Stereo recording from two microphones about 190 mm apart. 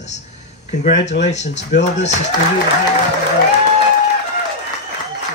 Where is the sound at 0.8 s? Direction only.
40° left (ahead or behind).